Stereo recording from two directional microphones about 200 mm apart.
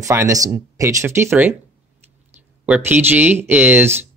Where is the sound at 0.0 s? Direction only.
15° right (ahead or behind).